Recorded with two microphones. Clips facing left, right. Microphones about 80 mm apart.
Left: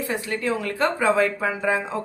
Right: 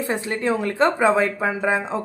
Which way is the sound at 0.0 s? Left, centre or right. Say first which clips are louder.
Right 3 dB; right.